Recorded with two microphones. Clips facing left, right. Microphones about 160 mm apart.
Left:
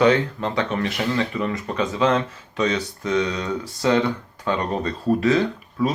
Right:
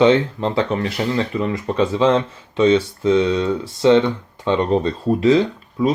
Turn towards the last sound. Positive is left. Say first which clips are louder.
# right 3 dB
turn(degrees=-25)  # may be behind; listen again after turning